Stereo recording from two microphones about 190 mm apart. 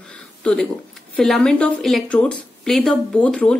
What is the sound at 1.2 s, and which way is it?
Speech, centre (ahead or behind).